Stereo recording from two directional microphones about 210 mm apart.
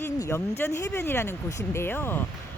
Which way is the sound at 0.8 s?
10° left (ahead or behind).